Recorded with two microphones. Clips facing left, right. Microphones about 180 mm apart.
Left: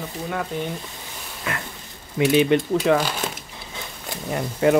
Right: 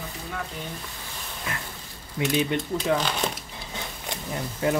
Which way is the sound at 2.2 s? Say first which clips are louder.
Left 7 dB; 75° left (ahead or behind).